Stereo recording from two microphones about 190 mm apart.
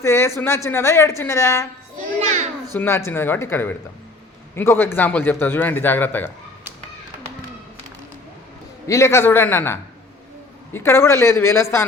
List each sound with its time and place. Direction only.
0.0 s a man's voice: 15° left (ahead or behind)
2.2 s children playing: 35° right (ahead or behind)
2.7 s a man's voice: 10° left (ahead or behind)
8.9 s a man's voice: 15° left (ahead or behind)